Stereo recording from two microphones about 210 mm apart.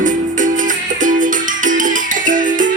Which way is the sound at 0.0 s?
40° right (ahead or behind).